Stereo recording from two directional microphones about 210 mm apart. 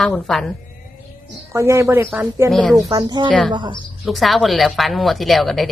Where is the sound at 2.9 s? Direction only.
20° right (ahead or behind).